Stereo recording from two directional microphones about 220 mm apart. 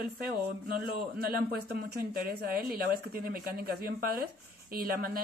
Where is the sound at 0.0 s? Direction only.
45° right (ahead or behind).